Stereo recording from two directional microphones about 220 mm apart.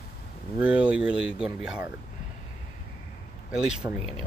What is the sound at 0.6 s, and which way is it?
Speech, 5° right (ahead or behind).